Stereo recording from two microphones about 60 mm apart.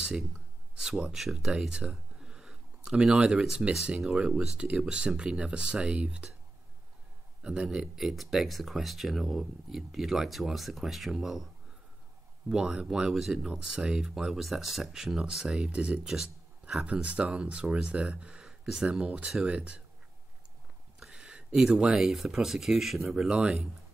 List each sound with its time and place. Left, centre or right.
0.7 s speech: centre
7.4 s speech: centre
7.7 s speech: centre
12.4 s speech: centre
16.8 s speech: right
21.1 s speech: centre
23.3 s speech: centre